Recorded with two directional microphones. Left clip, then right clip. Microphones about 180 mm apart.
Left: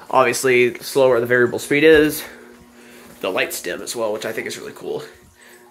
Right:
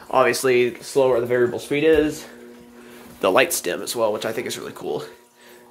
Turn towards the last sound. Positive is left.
turn(degrees=-5)  # may be behind; listen again after turning